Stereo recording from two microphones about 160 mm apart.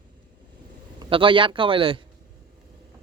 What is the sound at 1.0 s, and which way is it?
Speech, 35° right (ahead or behind).